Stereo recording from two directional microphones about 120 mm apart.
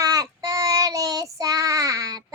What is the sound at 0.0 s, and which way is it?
Child singing, 30° right (ahead or behind).